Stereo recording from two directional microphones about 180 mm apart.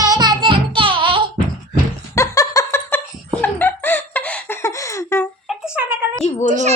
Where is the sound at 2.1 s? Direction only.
15° left (ahead or behind).